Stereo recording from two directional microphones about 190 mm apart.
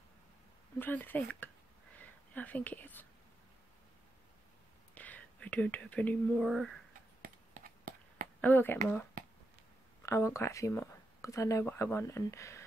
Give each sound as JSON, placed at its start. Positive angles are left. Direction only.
{"t": 0.7, "sound": "speech", "side_deg": 10}
{"t": 4.9, "sound": "speech", "side_deg": 10}
{"t": 7.2, "sound": "a sound", "side_deg": -50}
{"t": 8.4, "sound": "speech", "side_deg": 10}
{"t": 9.2, "sound": "a sound", "side_deg": -45}
{"t": 10.0, "sound": "speech", "side_deg": 15}